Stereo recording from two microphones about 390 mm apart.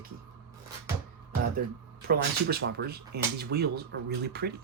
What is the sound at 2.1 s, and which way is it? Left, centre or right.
Speech, right.